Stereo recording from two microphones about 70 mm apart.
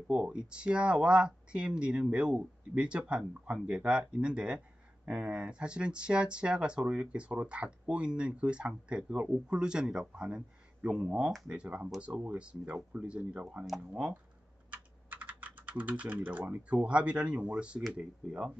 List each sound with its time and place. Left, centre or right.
0.1 s speech: centre
14.7 s speech: right